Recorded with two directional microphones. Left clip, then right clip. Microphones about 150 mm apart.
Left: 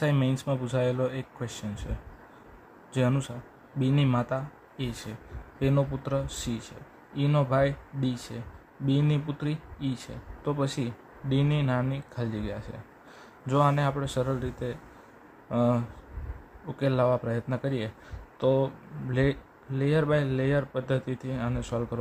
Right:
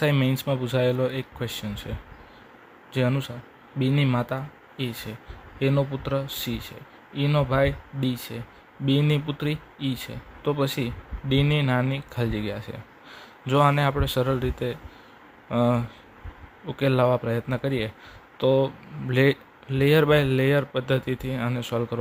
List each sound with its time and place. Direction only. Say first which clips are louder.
0.0 s speech: right 4 dB; 20° right (ahead or behind)